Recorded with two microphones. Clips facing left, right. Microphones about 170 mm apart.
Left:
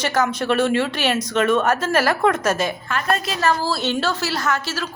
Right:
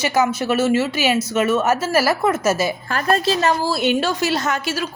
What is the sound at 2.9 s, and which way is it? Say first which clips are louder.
Speech: right 4 dB; 35° right (ahead or behind).